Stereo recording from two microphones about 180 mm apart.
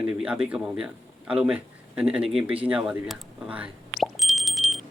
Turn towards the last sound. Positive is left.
turn(degrees=0)  # may be behind; listen again after turning